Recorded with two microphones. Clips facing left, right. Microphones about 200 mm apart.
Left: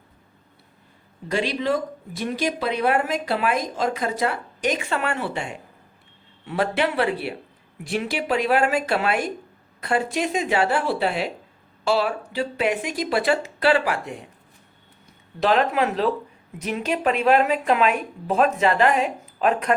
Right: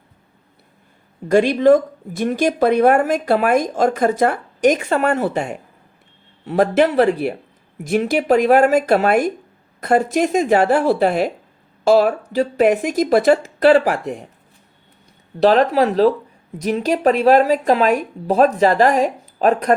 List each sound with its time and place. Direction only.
1.3 s speech: 50° right (ahead or behind)
15.4 s speech: 35° right (ahead or behind)